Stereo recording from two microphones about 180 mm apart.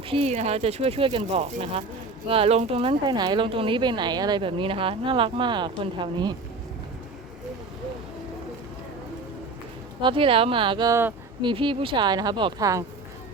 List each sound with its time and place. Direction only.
0.1 s speech: 35° right (ahead or behind)
10.0 s speech: 30° right (ahead or behind)
11.4 s speech: 30° right (ahead or behind)